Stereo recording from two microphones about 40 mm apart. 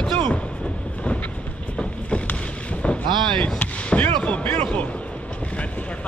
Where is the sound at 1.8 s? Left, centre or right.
Left.